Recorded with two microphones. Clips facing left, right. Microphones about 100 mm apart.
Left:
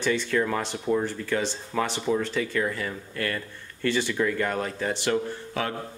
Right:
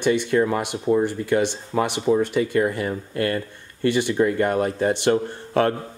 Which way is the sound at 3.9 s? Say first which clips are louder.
Right 5 dB; 20° right (ahead or behind).